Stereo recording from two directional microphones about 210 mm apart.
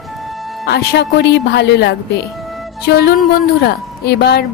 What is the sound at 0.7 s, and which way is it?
A woman's voice, 50° left (ahead or behind).